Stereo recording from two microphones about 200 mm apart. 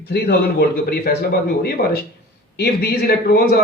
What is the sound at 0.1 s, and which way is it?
A man's voice, 55° left (ahead or behind).